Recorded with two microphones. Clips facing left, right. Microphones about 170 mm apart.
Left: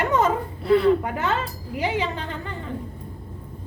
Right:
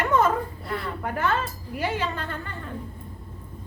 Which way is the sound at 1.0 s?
20° left (ahead or behind).